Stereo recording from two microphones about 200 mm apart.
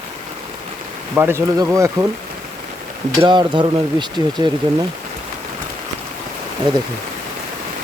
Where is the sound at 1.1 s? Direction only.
10° right (ahead or behind).